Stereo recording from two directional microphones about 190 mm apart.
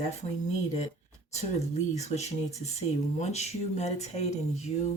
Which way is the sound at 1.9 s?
35° left (ahead or behind).